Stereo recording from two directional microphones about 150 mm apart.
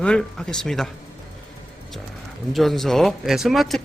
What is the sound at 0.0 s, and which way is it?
Speech, 5° left (ahead or behind).